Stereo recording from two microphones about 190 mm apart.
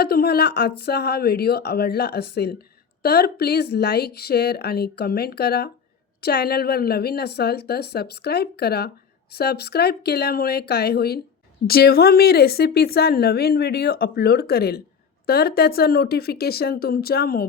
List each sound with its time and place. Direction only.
0.0 s a woman's voice: 55° left (ahead or behind)